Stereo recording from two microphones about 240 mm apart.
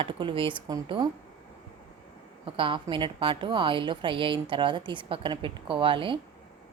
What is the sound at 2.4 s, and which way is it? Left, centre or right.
A woman's voice, right.